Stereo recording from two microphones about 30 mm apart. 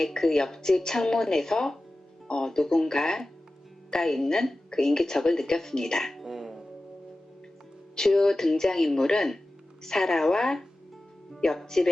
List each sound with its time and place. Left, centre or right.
0.1 s a woman's voice: centre
6.1 s music: centre
7.9 s a woman's voice: centre